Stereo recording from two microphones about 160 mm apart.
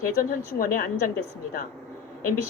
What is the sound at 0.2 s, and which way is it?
Speech, 60° left (ahead or behind).